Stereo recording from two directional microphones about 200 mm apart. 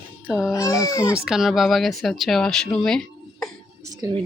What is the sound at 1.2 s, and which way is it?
Speech, centre (ahead or behind).